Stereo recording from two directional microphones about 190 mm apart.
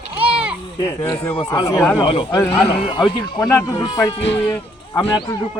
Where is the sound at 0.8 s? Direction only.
20° left (ahead or behind).